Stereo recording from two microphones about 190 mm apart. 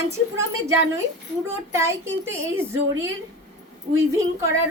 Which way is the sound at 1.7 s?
15° right (ahead or behind).